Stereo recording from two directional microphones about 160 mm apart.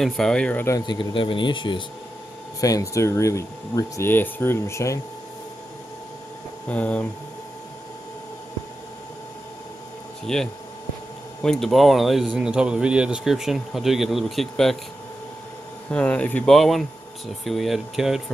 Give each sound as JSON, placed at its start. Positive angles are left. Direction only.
{"t": 0.0, "sound": "speech", "side_deg": 5}
{"t": 0.7, "sound": "speech", "side_deg": 30}
{"t": 6.7, "sound": "speech", "side_deg": 10}
{"t": 10.2, "sound": "speech", "side_deg": 5}
{"t": 15.9, "sound": "speech", "side_deg": 10}